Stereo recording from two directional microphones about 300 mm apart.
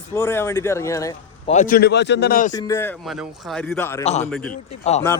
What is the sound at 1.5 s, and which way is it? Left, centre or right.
A man's voice, left.